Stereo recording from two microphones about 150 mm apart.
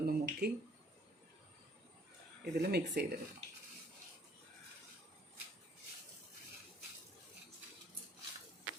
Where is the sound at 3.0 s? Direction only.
90° right.